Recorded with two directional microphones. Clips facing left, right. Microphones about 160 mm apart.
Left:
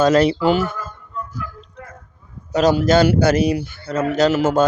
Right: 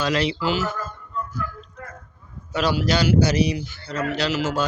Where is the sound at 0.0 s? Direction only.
45° left (ahead or behind).